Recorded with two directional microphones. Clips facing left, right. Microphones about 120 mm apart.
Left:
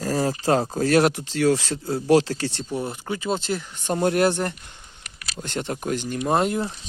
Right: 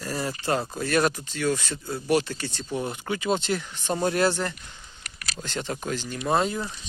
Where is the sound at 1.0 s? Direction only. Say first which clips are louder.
Left 5 dB; 80° left.